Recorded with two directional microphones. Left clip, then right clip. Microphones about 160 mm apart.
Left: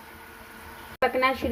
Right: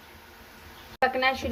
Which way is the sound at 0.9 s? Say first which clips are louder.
Left 1 dB; 25° left (ahead or behind).